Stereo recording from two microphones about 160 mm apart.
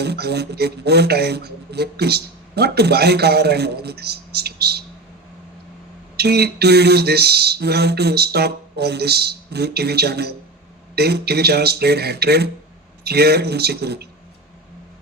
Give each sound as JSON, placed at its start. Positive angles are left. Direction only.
{"t": 0.0, "sound": "speech", "side_deg": -90}
{"t": 6.1, "sound": "speech", "side_deg": -90}